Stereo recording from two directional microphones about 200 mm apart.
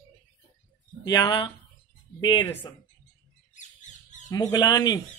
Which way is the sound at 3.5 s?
35° left (ahead or behind).